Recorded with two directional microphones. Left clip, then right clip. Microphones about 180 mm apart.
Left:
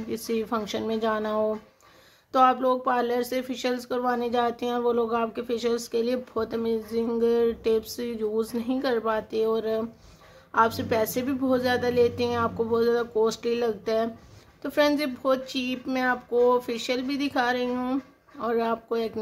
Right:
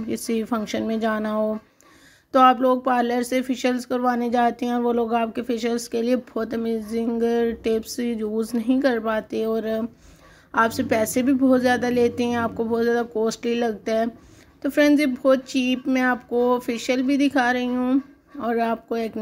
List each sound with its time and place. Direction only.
0.1 s speech: 15° right (ahead or behind)